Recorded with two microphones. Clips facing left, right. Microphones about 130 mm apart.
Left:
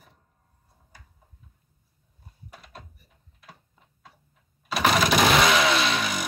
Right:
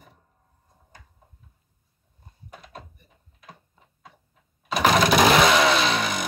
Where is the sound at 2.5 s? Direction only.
Centre (ahead or behind).